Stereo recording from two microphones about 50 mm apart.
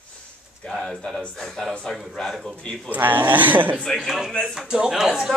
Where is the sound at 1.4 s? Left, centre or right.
Centre.